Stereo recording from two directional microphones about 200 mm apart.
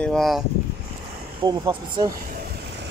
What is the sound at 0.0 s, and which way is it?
Speech, centre (ahead or behind).